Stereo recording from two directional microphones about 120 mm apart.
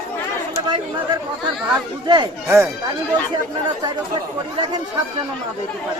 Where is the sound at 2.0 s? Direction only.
40° right (ahead or behind).